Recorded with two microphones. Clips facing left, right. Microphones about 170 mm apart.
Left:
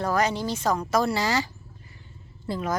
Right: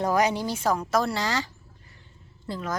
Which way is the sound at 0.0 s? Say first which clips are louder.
Right 1 dB; 15° right (ahead or behind).